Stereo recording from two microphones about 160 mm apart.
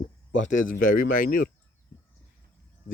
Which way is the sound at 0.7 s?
60° left (ahead or behind).